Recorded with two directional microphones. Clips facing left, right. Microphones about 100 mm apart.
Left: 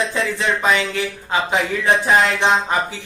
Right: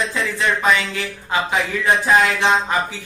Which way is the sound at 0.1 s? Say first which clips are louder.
Even; 25° left (ahead or behind).